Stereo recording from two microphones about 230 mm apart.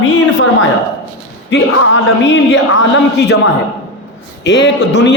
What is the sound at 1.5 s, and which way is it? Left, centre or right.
A man's voice, left.